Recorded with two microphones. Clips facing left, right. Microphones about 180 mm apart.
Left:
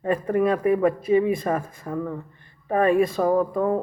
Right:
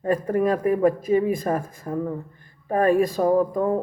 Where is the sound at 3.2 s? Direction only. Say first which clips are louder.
Right 1 dB; 5° right (ahead or behind).